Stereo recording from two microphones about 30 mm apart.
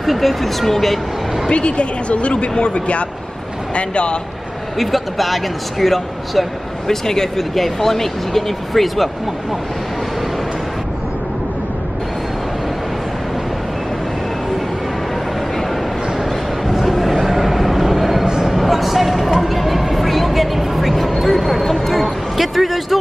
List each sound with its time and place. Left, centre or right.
0.0 s speech: centre
1.5 s speech: left
4.7 s speech: centre
6.9 s speech: centre
7.3 s speech: centre
16.6 s a sound: centre
18.2 s a sound: right
18.5 s music: centre
21.2 s a sound: centre